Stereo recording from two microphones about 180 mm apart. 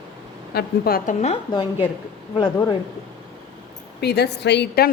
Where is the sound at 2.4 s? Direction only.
25° left (ahead or behind).